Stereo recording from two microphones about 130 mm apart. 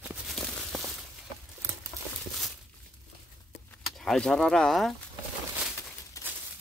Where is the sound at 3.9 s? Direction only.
5° left (ahead or behind).